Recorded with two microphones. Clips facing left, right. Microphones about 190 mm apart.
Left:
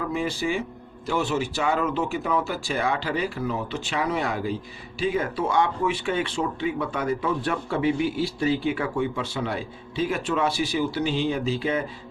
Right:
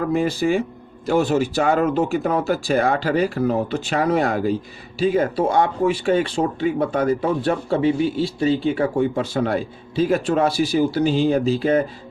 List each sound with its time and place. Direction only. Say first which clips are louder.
0.0 s speech: right 7 dB; 45° right (ahead or behind)